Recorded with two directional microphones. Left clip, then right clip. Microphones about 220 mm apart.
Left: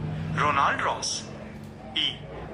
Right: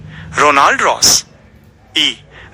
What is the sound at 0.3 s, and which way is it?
Speech, 55° right (ahead or behind).